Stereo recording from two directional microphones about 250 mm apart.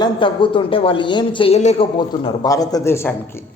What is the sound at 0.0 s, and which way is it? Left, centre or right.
A man's voice, centre.